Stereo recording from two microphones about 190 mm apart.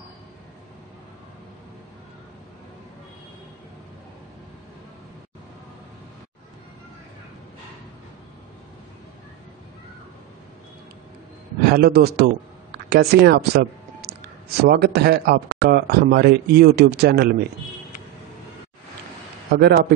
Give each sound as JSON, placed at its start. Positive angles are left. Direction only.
{"t": 11.6, "sound": "a man's voice", "side_deg": -55}
{"t": 19.6, "sound": "speech", "side_deg": -55}